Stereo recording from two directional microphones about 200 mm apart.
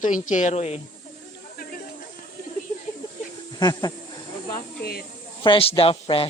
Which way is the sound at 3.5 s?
20° left (ahead or behind).